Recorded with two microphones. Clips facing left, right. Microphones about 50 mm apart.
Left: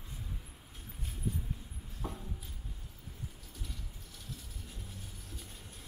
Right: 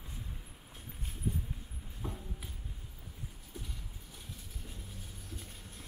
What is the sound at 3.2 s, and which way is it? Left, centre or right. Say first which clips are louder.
Music: right 2 dB; centre.